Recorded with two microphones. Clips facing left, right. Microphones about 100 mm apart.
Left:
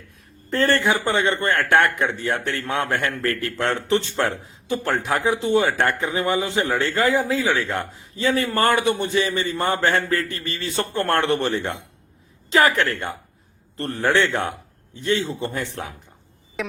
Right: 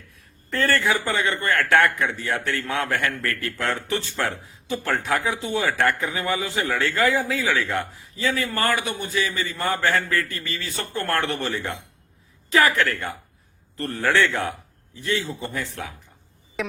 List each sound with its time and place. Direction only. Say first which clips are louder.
0.5 s speech: left 2 dB; 25° left (ahead or behind)
8.1 s a man's voice: left 4 dB; 35° left (ahead or behind)
8.7 s a man's voice: left 6 dB; 25° left (ahead or behind)
10.2 s a man's voice: left 3 dB; 25° left (ahead or behind)
16.6 s a sound: even; centre (ahead or behind)